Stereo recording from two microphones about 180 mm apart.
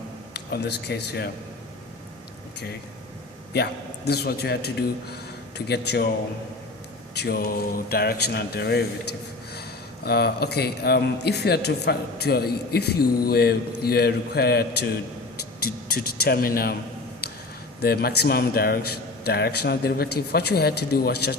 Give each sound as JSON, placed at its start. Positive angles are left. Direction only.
{"t": 0.3, "sound": "a man's voice", "side_deg": 65}
{"t": 3.5, "sound": "a man's voice", "side_deg": 65}
{"t": 7.1, "sound": "a man's voice", "side_deg": 60}
{"t": 17.8, "sound": "a man's voice", "side_deg": 60}